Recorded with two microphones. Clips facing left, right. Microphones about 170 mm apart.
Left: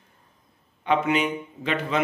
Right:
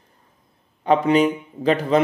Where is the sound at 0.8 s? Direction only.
35° right (ahead or behind).